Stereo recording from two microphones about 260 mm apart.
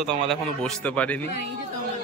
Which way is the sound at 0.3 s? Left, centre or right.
Centre.